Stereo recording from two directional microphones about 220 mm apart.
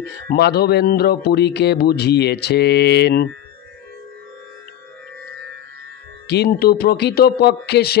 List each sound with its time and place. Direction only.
0.3 s speech: 45° left (ahead or behind)
6.2 s speech: 50° left (ahead or behind)